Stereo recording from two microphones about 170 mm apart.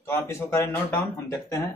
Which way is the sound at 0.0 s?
15° left (ahead or behind).